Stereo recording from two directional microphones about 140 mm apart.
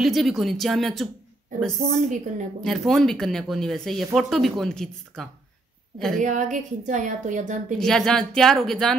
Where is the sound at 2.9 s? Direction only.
Centre (ahead or behind).